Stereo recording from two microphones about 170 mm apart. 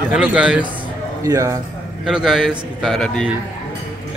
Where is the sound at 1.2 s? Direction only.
20° right (ahead or behind).